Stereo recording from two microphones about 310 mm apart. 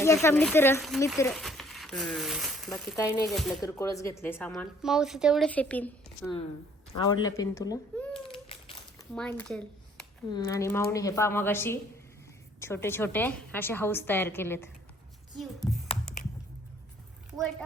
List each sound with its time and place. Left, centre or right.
0.0 s a woman's voice: centre
2.9 s a woman's voice: centre
3.6 s a woman's voice: centre
8.2 s a sound: centre
9.1 s a woman's voice: centre
15.9 s computer keyboard: centre